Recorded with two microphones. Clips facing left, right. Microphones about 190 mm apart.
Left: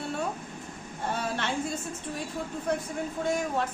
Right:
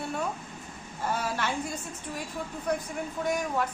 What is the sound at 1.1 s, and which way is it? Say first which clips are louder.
Speech: even; 25° left (ahead or behind).